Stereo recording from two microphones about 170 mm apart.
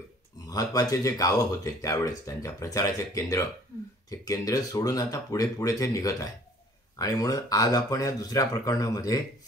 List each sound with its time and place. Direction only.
0.5 s speech: 20° left (ahead or behind)